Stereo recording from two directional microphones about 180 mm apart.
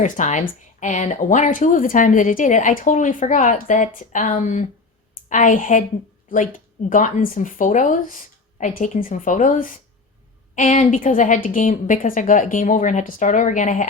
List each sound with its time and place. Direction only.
0.0 s speech: 45° left (ahead or behind)
6.9 s speech: 45° left (ahead or behind)